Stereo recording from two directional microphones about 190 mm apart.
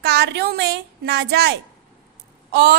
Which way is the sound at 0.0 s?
60° right (ahead or behind).